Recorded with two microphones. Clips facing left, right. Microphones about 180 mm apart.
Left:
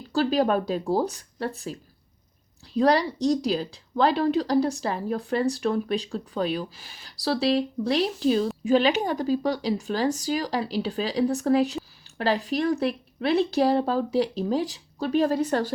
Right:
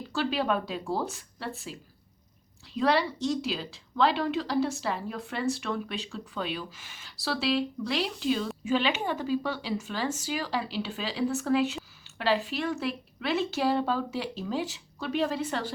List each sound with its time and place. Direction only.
0.1 s speech: 40° left (ahead or behind)
2.7 s speech: 40° left (ahead or behind)